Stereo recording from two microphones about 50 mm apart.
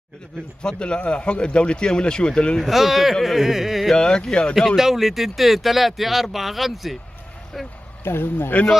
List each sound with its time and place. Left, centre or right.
0.6 s speech: centre
2.6 s speech: centre
3.9 s speech: centre
4.7 s speech: centre
8.0 s speech: left